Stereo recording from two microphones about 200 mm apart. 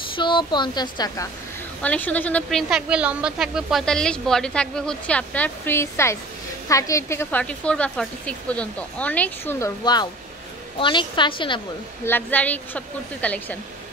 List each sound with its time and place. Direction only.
0.1 s speech: 25° left (ahead or behind)
1.8 s a woman's voice: 5° left (ahead or behind); by 11.6 s 25° left (ahead or behind)
12.0 s speech: 10° left (ahead or behind)